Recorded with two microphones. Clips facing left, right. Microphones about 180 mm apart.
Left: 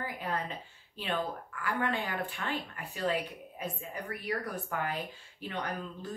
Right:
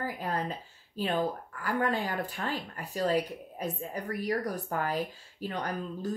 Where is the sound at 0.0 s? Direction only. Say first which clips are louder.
Right 2 dB; 40° right (ahead or behind).